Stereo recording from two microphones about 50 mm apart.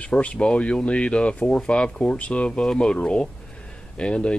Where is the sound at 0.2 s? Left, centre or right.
Left.